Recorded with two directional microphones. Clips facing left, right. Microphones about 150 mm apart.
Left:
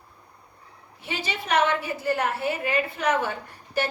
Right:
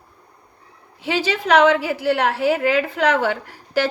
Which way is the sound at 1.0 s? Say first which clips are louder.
Right 10 dB; 90° right.